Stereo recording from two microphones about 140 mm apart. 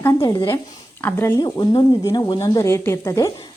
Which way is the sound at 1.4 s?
30° left (ahead or behind).